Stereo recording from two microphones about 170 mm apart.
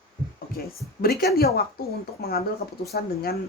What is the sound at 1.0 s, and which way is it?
Speech, 65° left (ahead or behind).